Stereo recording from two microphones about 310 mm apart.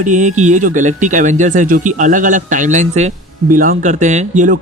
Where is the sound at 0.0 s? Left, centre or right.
Right.